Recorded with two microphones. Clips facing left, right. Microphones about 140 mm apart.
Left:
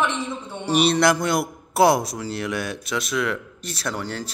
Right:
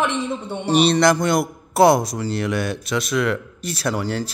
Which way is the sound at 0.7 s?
5° left (ahead or behind).